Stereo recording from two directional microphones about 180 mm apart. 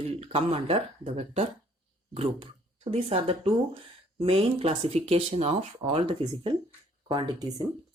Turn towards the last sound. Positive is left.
turn(degrees=-25)  # may be behind; listen again after turning